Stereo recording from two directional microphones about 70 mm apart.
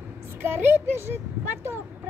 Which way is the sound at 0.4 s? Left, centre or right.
Right.